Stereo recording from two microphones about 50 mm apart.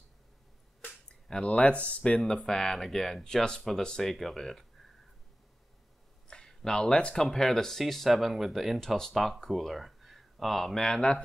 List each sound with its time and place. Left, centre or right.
0.8 s speech: left
2.1 s speech: centre
6.2 s a sound: centre
7.2 s speech: centre
8.7 s speech: centre